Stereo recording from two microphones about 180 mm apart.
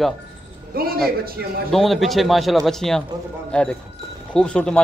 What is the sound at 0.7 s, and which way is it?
Speech, 55° right (ahead or behind).